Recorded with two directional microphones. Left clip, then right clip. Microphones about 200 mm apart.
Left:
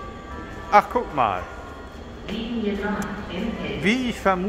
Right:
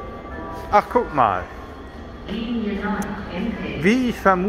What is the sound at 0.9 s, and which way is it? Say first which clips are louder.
Speech: right 4 dB; 5° right (ahead or behind).